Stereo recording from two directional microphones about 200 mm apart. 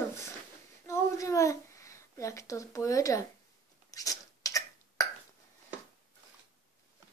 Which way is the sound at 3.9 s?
15° left (ahead or behind).